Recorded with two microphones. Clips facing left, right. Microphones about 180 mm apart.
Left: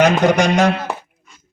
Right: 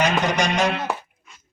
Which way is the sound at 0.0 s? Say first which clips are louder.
Left 7 dB; 45° left (ahead or behind).